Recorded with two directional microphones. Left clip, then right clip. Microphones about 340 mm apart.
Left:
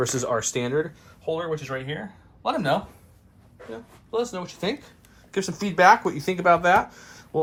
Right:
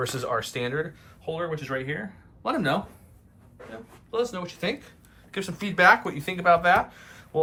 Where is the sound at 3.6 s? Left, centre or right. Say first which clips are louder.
Left 4 dB; centre.